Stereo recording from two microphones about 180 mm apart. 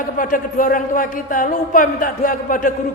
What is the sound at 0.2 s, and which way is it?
A man's voice, 50° left (ahead or behind).